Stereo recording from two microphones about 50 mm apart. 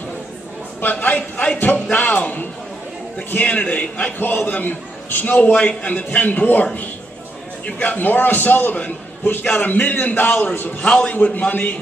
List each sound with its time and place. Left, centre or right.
0.7 s a man's voice: left
3.4 s a man's voice: left
4.2 s a man's voice: left
10.8 s a man's voice: centre
11.1 s a man's voice: left